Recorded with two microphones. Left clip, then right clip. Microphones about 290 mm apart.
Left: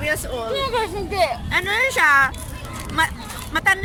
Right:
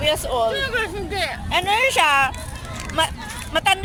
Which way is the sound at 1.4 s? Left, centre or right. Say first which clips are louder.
Right 1 dB; centre.